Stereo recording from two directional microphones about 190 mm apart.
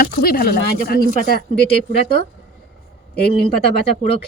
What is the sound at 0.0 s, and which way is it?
Speech, 50° left (ahead or behind).